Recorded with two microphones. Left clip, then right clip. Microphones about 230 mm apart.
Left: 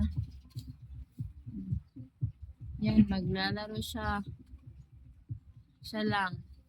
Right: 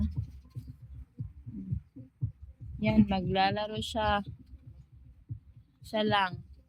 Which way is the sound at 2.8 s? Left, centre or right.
Centre.